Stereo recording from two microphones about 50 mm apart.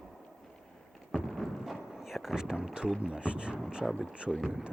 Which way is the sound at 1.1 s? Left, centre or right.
Centre.